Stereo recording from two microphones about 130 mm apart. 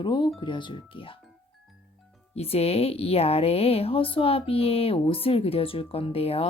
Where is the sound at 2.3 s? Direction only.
50° left (ahead or behind).